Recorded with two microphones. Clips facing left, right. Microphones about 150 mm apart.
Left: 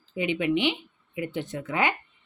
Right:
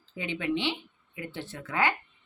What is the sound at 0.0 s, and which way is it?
Speech, 15° left (ahead or behind).